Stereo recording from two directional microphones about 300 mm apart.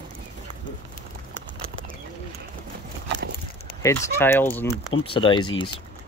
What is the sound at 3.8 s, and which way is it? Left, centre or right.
Speech, centre.